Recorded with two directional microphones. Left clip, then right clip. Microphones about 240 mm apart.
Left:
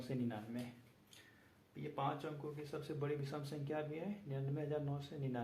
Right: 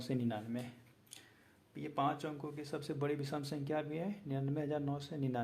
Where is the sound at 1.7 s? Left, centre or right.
Right.